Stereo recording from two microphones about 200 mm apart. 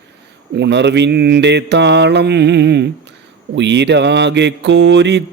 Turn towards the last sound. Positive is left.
turn(degrees=-60)  # may be behind; listen again after turning